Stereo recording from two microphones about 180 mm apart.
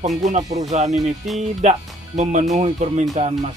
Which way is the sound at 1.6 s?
40° right (ahead or behind).